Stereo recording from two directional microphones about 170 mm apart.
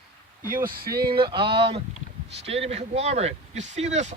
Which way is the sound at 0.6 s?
60° right (ahead or behind).